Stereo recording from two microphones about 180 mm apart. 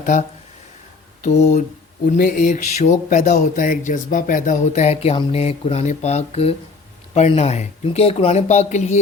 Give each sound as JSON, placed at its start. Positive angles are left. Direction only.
{"t": 0.0, "sound": "speech", "side_deg": 45}
{"t": 2.1, "sound": "speech", "side_deg": 50}